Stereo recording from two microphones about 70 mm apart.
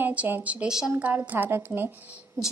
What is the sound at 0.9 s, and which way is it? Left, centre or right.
A woman's voice, right.